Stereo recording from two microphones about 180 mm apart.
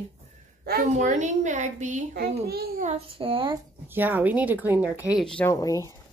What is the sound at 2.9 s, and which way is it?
Speech, 30° right (ahead or behind).